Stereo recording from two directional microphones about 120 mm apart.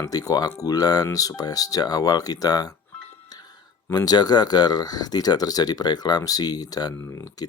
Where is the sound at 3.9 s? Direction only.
35° left (ahead or behind).